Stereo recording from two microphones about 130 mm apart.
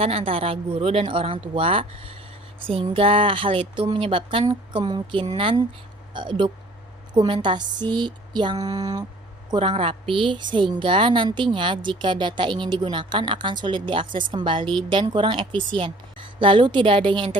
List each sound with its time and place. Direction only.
0.0 s speech: 45° right (ahead or behind); by 9.0 s 30° right (ahead or behind)
9.6 s speech: 45° right (ahead or behind)